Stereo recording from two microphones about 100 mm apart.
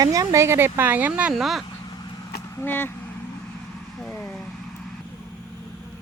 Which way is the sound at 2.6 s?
20° left (ahead or behind).